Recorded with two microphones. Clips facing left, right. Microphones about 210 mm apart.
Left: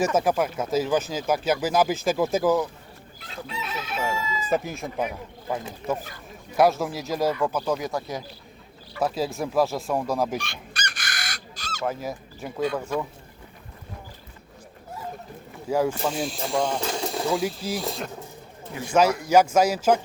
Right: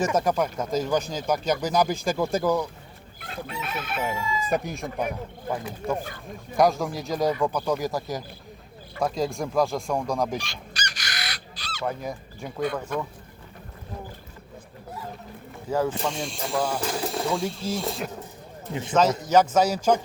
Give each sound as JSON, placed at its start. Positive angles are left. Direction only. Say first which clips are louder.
{"t": 0.2, "sound": "speech", "louder": "left 1 dB", "side_deg": 5}
{"t": 3.2, "sound": "chicken", "louder": "right 1 dB", "side_deg": -55}
{"t": 4.6, "sound": "speech", "louder": "left 1 dB", "side_deg": 0}
{"t": 6.6, "sound": "speech", "louder": "left 1 dB", "side_deg": 5}
{"t": 10.3, "sound": "chicken", "louder": "left 1 dB", "side_deg": 55}
{"t": 11.9, "sound": "speech", "louder": "left 1 dB", "side_deg": 5}
{"t": 15.7, "sound": "speech", "louder": "left 2 dB", "side_deg": 10}
{"t": 18.7, "sound": "speech", "louder": "right 3 dB", "side_deg": -25}
{"t": 19.2, "sound": "speech", "louder": "left 1 dB", "side_deg": 10}